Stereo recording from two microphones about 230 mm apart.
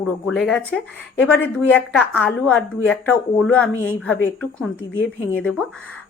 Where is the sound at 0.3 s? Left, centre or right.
Centre.